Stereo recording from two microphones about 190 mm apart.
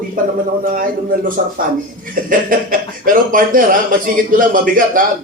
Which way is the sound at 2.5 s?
45° right (ahead or behind).